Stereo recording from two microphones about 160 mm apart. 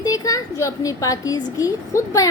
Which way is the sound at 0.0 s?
20° left (ahead or behind).